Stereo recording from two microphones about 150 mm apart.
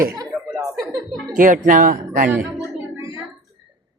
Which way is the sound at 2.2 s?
10° right (ahead or behind).